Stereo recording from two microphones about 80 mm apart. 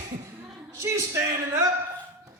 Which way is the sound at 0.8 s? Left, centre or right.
Right.